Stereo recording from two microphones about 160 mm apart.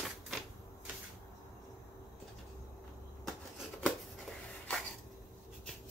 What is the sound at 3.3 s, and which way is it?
Scissors, centre (ahead or behind).